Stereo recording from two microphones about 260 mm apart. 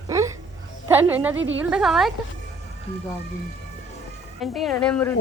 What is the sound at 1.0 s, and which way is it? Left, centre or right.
Speech, centre.